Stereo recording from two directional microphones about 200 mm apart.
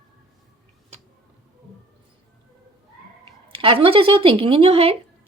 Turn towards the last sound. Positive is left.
turn(degrees=-30)  # may be behind; listen again after turning